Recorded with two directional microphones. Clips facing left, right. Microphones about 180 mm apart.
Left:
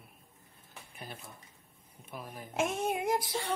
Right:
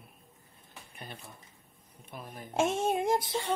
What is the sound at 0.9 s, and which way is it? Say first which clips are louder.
Speech: even; 5° left (ahead or behind).